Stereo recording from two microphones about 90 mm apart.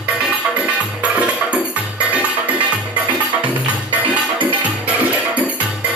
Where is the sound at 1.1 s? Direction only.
15° right (ahead or behind).